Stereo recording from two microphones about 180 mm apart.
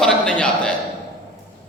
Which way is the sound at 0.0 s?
5° left (ahead or behind).